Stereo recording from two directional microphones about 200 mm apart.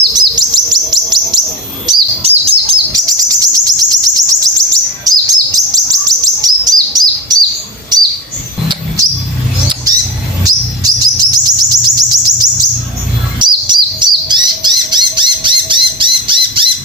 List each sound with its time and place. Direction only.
0.1 s chirp: 20° right (ahead or behind)
1.9 s chirp: 30° right (ahead or behind)
2.9 s chirp: 20° right (ahead or behind)
8.6 s a sound: 25° right (ahead or behind)
10.4 s chirp: 20° right (ahead or behind)
13.4 s bird: 25° right (ahead or behind)